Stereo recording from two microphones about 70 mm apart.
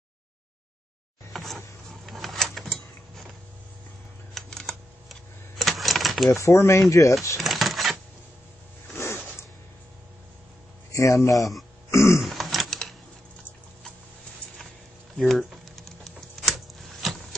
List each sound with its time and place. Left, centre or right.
1.3 s a sound: centre
4.3 s typing: centre
5.6 s typewriter: centre
6.3 s speech: left
7.3 s drawer open or close: centre
8.9 s a sound: left
10.9 s speech: left
11.9 s throat clearing: left
12.2 s typing: centre
15.1 s a sound: centre